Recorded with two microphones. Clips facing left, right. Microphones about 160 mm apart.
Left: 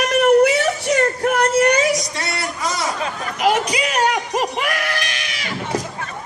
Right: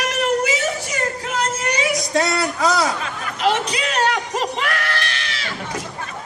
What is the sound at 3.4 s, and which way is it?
Speech, 10° left (ahead or behind).